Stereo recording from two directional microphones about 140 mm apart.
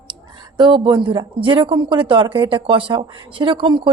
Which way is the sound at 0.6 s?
35° right (ahead or behind).